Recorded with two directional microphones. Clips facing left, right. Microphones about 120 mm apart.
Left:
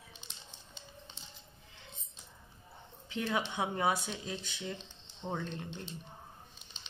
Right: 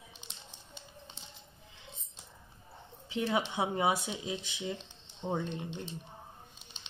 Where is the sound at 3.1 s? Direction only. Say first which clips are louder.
Right 3 dB; 15° right (ahead or behind).